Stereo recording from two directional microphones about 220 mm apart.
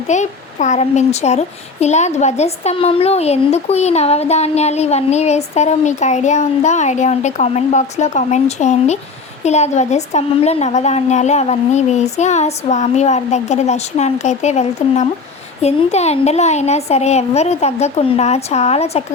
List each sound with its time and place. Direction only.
0.1 s speech: 35° left (ahead or behind)